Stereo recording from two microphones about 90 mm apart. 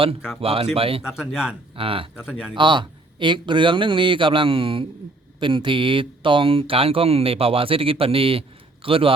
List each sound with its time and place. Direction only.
0.4 s speech: 90° right
1.0 s speech: 5° right (ahead or behind)
1.7 s speech: 90° right
2.1 s speech: 10° right (ahead or behind)
2.6 s speech: 60° right (ahead or behind); by 4.9 s 80° right
5.4 s speech: 65° right (ahead or behind); by 9.1 s 90° right